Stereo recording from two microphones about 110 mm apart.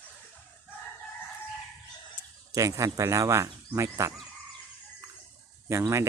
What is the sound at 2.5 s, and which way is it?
Speech, 30° right (ahead or behind).